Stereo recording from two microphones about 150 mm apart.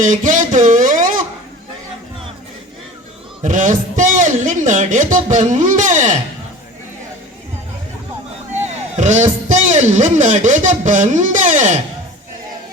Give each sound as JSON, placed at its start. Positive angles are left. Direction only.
{"t": 0.0, "sound": "a sound", "side_deg": -55}
{"t": 3.4, "sound": "a man's voice", "side_deg": -60}
{"t": 8.6, "sound": "speech", "side_deg": -50}